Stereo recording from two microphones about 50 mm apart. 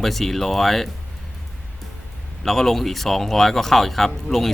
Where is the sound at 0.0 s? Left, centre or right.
Centre.